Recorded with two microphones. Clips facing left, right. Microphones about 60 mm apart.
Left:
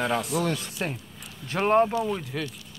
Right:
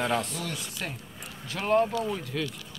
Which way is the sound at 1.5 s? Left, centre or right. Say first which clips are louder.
Left 3 dB; left.